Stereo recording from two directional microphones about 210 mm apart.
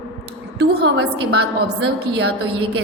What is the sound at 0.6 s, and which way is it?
Speech, 55° right (ahead or behind).